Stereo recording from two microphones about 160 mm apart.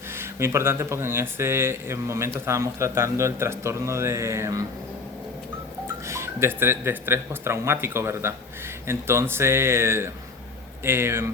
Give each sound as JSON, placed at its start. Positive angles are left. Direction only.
{"t": 0.2, "sound": "speech", "side_deg": -15}
{"t": 6.1, "sound": "speech", "side_deg": -15}